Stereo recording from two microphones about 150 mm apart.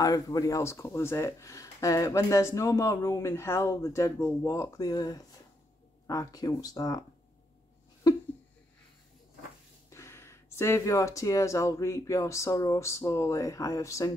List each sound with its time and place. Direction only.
0.0 s speech: 25° left (ahead or behind)
9.8 s speech: 20° left (ahead or behind)